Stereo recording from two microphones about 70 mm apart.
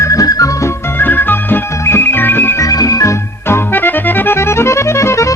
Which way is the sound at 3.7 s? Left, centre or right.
Left.